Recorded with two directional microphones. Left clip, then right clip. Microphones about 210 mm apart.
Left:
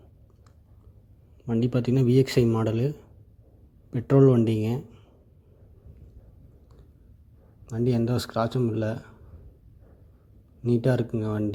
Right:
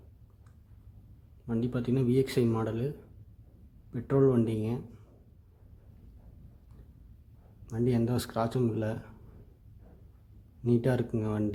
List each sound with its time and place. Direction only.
1.5 s speech: 25° left (ahead or behind)
3.9 s speech: 30° left (ahead or behind)
7.7 s speech: 20° left (ahead or behind)
10.6 s speech: 20° left (ahead or behind)